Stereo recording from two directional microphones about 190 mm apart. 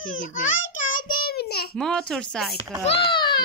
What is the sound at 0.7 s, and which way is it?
Child singing, 45° left (ahead or behind).